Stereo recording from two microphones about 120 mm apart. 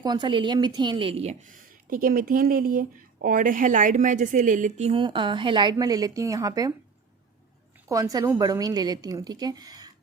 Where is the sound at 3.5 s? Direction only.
90° right.